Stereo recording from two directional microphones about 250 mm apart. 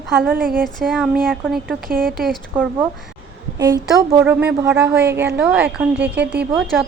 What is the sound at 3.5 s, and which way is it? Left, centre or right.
A woman's voice, centre.